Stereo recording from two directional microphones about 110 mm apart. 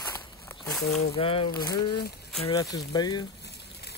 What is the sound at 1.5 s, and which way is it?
Speech, 35° left (ahead or behind).